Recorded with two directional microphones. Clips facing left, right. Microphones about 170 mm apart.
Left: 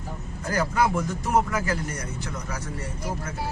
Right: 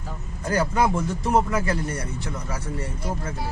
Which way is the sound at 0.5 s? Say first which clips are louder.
Right 2 dB; 30° right (ahead or behind).